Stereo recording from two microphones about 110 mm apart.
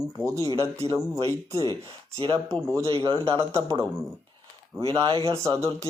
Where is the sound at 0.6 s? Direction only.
30° right (ahead or behind).